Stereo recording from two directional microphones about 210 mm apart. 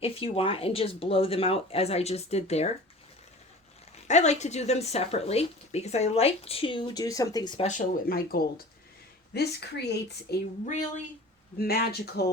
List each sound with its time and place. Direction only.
0.0 s speech: 25° left (ahead or behind)
3.9 s speech: 35° left (ahead or behind)
7.7 s speech: 40° left (ahead or behind)
11.5 s speech: 45° left (ahead or behind)